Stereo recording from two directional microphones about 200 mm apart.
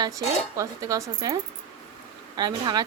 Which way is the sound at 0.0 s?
15° right (ahead or behind).